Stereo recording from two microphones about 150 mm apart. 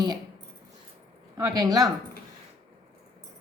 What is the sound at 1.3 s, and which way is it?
Speech, 25° right (ahead or behind).